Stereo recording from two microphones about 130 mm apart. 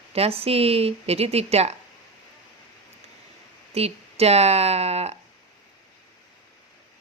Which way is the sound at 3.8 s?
50° right (ahead or behind).